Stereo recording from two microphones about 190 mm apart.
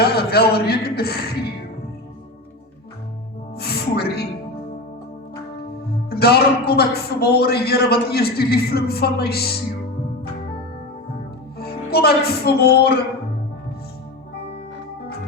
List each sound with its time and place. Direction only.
0.0 s a man's voice: 55° left (ahead or behind)
3.5 s music: 55° left (ahead or behind)
5.8 s a man's voice: 55° left (ahead or behind)
11.5 s speech: 55° left (ahead or behind)